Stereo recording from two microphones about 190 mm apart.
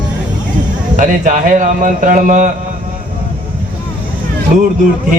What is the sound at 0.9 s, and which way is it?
Speech, 40° right (ahead or behind).